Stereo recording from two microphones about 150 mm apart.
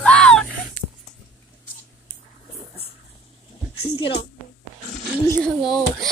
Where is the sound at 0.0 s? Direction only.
5° left (ahead or behind).